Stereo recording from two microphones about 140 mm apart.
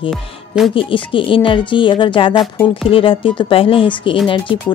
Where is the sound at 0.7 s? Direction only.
40° left (ahead or behind).